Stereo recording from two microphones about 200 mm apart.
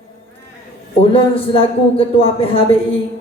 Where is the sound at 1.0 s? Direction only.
25° left (ahead or behind).